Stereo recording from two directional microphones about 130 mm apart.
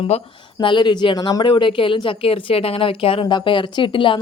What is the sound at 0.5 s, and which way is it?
Speech, 35° left (ahead or behind).